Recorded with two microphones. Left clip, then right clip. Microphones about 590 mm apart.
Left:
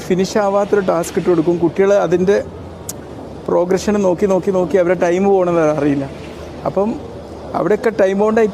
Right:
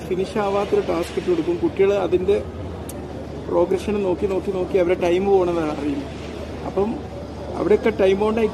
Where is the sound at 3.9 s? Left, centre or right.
Left.